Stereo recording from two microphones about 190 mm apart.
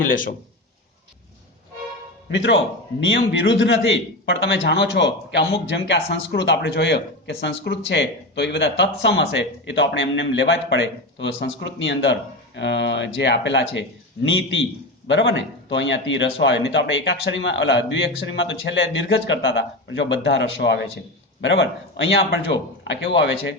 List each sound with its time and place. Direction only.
0.1 s a man's voice: 45° left (ahead or behind)
2.3 s a man's voice: 80° left
15.0 s a man's voice: 75° left (ahead or behind)